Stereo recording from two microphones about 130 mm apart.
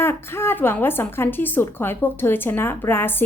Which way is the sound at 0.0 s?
20° left (ahead or behind).